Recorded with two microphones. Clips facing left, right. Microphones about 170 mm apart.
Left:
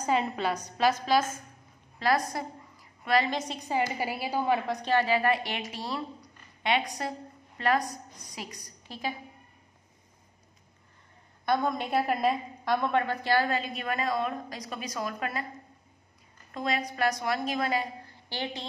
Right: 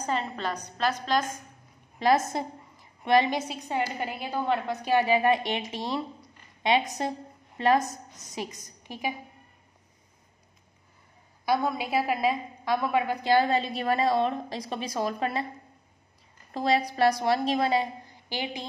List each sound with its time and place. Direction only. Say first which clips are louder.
0.0 s a woman's voice: left 3 dB; 10° left (ahead or behind)
2.0 s a woman's voice: right 4 dB; 20° right (ahead or behind)
3.3 s a woman's voice: even; centre (ahead or behind)
4.8 s a woman's voice: right 3 dB; 15° right (ahead or behind)
11.4 s a woman's voice: right 1 dB; 5° right (ahead or behind); by 15.4 s 25° right (ahead or behind)
16.5 s a woman's voice: right 5 dB; 30° right (ahead or behind); by 18.7 s 15° right (ahead or behind)